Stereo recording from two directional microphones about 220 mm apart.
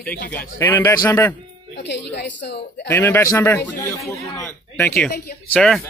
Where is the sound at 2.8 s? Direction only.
10° left (ahead or behind).